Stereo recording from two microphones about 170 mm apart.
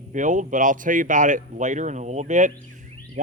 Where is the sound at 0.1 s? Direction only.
50° right (ahead or behind).